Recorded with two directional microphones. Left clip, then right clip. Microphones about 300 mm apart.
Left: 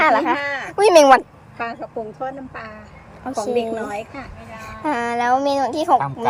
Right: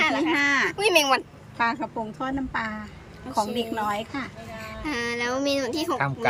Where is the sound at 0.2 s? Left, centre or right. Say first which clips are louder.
Left 1 dB; right.